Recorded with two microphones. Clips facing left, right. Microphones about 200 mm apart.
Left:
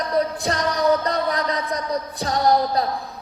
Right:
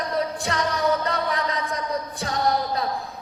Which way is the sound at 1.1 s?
35° left (ahead or behind).